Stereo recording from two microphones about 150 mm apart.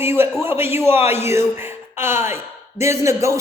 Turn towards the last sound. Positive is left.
turn(degrees=-20)  # may be behind; listen again after turning